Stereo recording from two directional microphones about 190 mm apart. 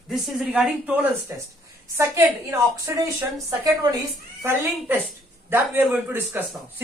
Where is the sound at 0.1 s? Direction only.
Centre (ahead or behind).